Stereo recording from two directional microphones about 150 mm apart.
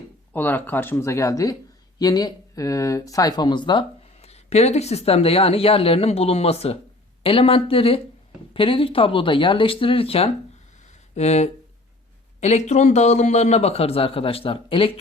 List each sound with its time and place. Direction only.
0.3 s a man's voice: 10° left (ahead or behind); by 14.9 s 35° left (ahead or behind)